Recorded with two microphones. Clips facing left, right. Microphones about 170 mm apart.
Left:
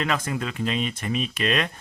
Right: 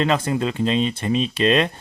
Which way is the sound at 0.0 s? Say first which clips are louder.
Right 6 dB; 30° right (ahead or behind).